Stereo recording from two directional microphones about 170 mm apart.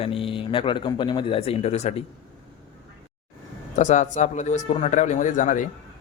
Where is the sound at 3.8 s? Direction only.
45° left (ahead or behind).